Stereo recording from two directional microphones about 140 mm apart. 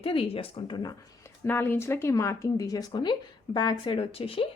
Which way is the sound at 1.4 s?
15° left (ahead or behind).